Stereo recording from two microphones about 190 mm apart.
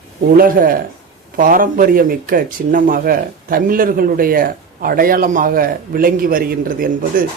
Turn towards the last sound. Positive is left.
turn(degrees=-50)  # may be behind; listen again after turning